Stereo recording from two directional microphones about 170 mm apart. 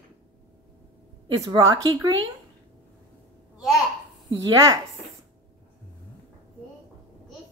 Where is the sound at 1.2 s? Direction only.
25° right (ahead or behind).